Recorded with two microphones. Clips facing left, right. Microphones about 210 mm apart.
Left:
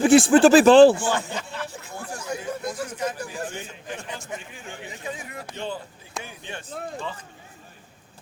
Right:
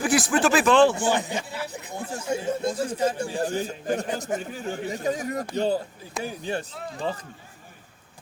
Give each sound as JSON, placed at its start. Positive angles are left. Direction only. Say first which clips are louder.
{"t": 0.0, "sound": "speech", "louder": "left 8 dB", "side_deg": 25}
{"t": 0.9, "sound": "speech", "louder": "right 2 dB", "side_deg": -15}